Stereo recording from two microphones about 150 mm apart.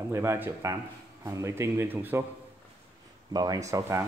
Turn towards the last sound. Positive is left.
turn(degrees=-20)  # may be behind; listen again after turning